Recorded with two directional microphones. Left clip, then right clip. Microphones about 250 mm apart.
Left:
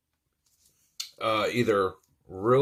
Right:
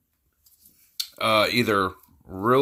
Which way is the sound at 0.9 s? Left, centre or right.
Right.